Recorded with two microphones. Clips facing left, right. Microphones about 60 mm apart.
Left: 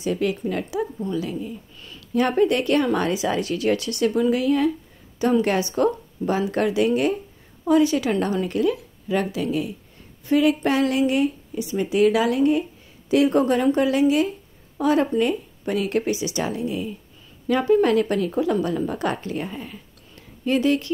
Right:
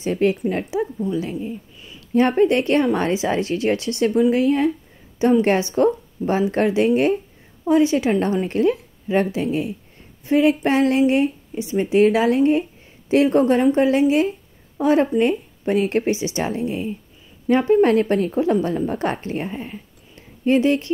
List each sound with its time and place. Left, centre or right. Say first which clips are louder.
0.0 s a woman's voice: right 4 dB; right